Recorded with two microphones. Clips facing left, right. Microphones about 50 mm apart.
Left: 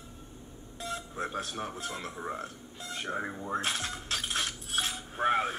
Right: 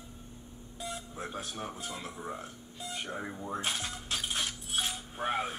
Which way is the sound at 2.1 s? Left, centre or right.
Centre.